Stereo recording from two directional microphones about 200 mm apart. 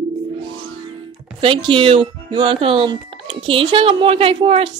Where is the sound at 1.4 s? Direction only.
25° right (ahead or behind).